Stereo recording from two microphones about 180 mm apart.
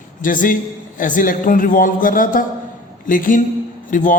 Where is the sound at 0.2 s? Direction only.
50° left (ahead or behind).